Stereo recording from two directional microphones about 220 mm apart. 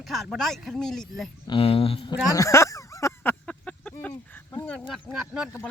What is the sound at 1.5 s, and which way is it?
Speech, 25° left (ahead or behind).